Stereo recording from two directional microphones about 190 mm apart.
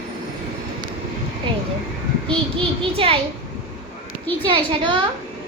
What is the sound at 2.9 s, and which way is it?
Speech, 30° right (ahead or behind).